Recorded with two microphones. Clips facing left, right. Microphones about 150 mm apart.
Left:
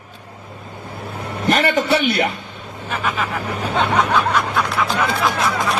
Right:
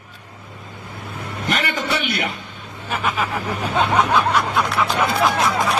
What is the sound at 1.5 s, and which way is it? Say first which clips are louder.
Speech: left 7 dB; 35° left (ahead or behind).